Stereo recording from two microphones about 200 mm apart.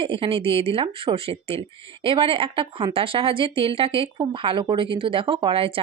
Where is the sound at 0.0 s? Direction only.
25° right (ahead or behind).